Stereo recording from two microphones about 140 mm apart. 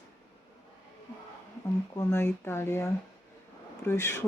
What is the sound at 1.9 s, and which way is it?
Speech, 20° left (ahead or behind).